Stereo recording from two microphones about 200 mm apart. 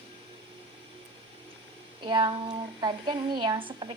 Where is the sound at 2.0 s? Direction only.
25° right (ahead or behind).